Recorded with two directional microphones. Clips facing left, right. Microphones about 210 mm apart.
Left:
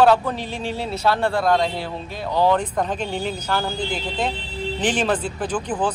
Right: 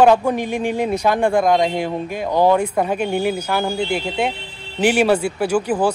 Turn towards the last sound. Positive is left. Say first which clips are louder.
# right 6 dB
turn(degrees=-10)  # may be behind; listen again after turning